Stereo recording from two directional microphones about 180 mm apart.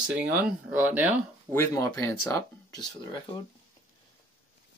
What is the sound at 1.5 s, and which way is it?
Speech, 15° left (ahead or behind).